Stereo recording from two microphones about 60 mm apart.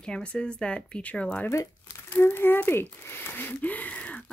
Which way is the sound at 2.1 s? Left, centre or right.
Left.